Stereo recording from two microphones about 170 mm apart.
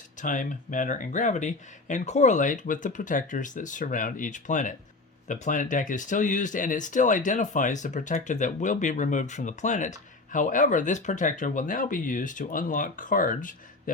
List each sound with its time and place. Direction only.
0.2 s speech: 50° left (ahead or behind)